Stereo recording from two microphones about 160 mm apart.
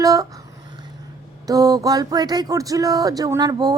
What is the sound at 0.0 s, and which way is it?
Speech, 20° right (ahead or behind).